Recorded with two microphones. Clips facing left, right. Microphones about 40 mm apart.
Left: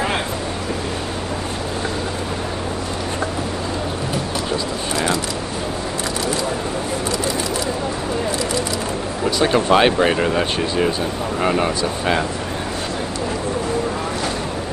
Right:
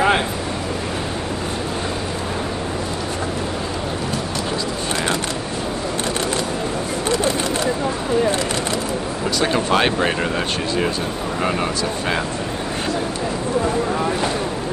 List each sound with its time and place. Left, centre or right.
9.5 s speech: centre